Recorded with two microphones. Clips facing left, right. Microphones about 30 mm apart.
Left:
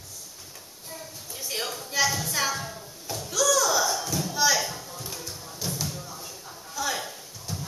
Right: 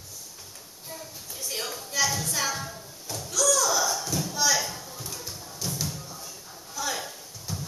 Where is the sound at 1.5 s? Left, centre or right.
Centre.